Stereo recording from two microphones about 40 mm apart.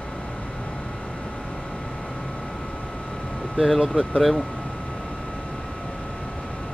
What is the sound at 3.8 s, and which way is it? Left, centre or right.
Speech, centre.